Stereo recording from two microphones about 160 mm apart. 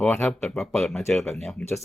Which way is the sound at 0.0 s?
10° left (ahead or behind).